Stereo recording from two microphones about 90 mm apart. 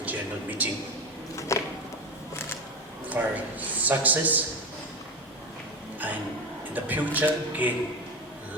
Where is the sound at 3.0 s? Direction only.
20° right (ahead or behind).